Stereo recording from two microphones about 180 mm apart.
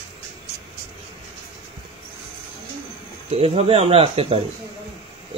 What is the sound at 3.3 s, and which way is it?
A man's voice, 35° right (ahead or behind).